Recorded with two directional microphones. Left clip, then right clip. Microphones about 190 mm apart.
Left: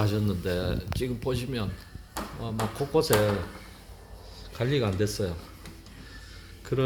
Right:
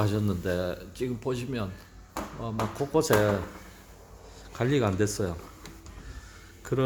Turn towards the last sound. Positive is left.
turn(degrees=-15)  # may be behind; listen again after turning